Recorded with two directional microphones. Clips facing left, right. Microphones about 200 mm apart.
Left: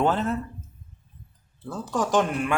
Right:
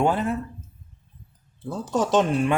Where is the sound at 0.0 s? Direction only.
10° right (ahead or behind).